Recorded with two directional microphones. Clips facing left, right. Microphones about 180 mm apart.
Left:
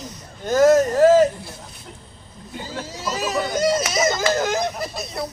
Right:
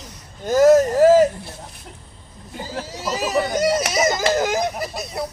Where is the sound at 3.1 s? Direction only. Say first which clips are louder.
Right 3 dB; 35° right (ahead or behind).